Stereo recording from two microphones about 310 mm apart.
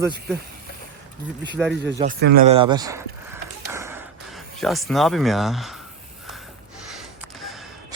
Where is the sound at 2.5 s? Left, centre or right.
Centre.